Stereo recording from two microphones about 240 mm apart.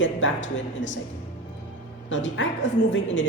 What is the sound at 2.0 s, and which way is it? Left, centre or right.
Speech, left.